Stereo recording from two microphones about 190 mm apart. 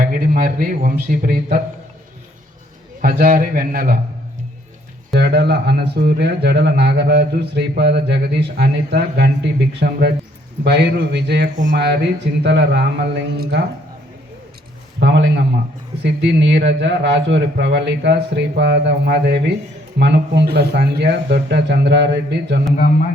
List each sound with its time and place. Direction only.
0.0 s speech: 45° right (ahead or behind)
3.0 s speech: 50° right (ahead or behind)
5.1 s speech: 60° right (ahead or behind)
14.9 s a man's voice: 65° right (ahead or behind)